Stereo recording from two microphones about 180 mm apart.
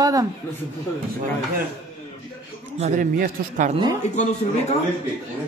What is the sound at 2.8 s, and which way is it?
Speech, 50° right (ahead or behind).